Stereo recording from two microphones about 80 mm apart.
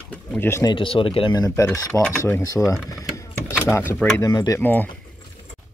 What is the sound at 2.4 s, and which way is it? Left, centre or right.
Speech, left.